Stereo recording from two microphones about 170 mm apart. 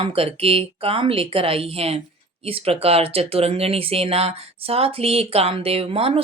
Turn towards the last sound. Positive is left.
turn(degrees=-35)  # may be behind; listen again after turning